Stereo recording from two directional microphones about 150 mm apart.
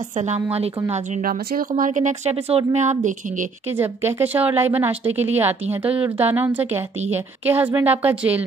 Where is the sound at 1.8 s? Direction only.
55° right (ahead or behind).